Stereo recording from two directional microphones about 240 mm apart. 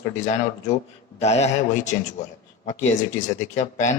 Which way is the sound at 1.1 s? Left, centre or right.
Left.